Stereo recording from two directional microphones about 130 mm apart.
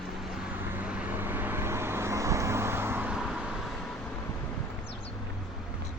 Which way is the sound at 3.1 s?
5° right (ahead or behind).